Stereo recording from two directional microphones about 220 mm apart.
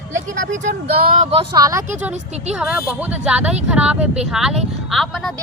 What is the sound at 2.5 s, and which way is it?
Speech, 5° right (ahead or behind).